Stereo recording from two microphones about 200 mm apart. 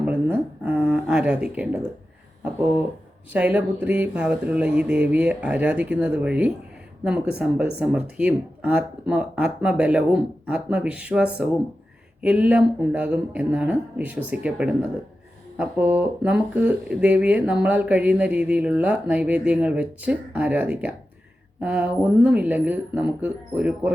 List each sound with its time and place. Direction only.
0.0 s speech: 10° right (ahead or behind)
3.3 s speech: 5° right (ahead or behind)